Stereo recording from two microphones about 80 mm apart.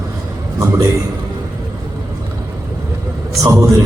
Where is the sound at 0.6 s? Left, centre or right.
Right.